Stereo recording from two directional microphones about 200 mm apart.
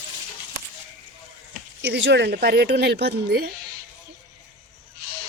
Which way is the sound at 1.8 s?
60° right (ahead or behind).